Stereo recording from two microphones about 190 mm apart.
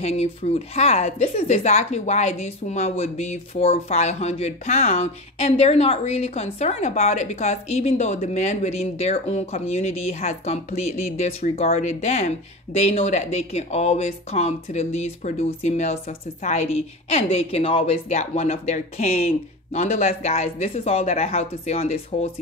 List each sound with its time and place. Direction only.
0.0 s speech: 35° left (ahead or behind)